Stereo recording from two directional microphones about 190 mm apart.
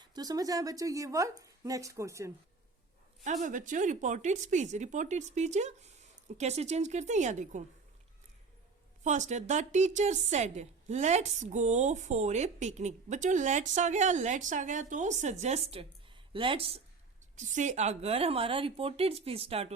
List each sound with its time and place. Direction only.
0.0 s a woman's voice: 20° right (ahead or behind)
3.4 s a woman's voice: 40° right (ahead or behind)
9.0 s a woman's voice: 40° right (ahead or behind)
17.3 s a woman's voice: 40° right (ahead or behind)